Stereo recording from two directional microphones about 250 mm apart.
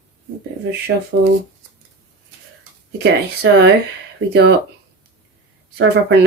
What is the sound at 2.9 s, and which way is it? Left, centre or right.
Speech, right.